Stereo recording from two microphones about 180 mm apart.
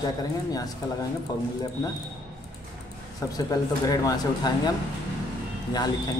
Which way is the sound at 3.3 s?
20° left (ahead or behind).